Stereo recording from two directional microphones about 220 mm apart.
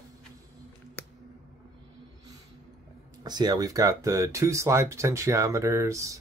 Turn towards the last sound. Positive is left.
turn(degrees=-15)  # may be behind; listen again after turning